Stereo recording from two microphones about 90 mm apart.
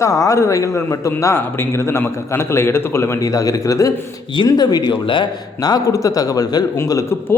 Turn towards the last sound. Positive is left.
turn(degrees=35)  # may be behind; listen again after turning